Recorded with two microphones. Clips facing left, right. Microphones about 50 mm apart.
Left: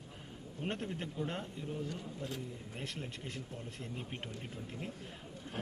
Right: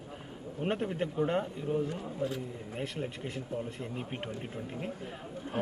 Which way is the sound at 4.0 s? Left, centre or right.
Right.